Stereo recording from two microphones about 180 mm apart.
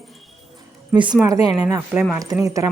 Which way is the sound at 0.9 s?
25° right (ahead or behind).